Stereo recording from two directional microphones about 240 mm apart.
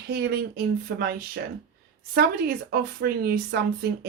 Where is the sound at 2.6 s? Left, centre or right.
Right.